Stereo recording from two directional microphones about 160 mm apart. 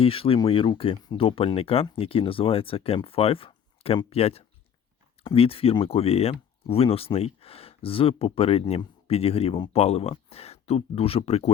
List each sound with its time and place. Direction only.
0.0 s speech: 35° left (ahead or behind)